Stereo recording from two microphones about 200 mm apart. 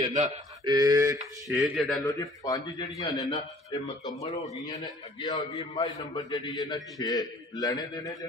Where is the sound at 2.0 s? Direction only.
15° left (ahead or behind).